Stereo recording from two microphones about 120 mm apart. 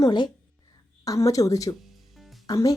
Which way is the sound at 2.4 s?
30° left (ahead or behind).